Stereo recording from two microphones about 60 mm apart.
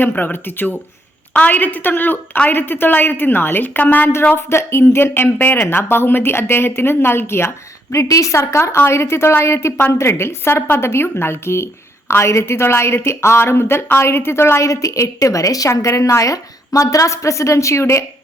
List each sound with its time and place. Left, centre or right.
0.1 s a woman's voice: left
4.4 s speech: left
7.9 s a woman's voice: left
8.4 s a woman's voice: left
14.7 s a woman's voice: left
15.8 s a woman's voice: left